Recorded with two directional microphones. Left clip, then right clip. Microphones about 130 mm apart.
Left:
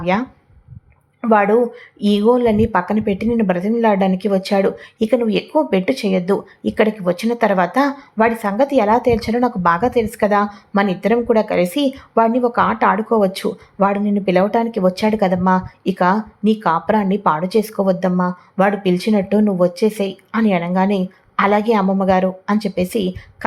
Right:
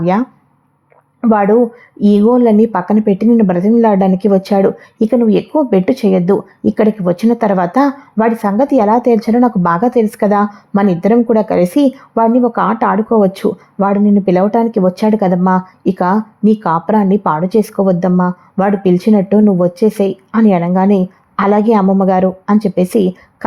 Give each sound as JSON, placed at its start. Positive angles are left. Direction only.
{"t": 1.2, "sound": "speech", "side_deg": -45}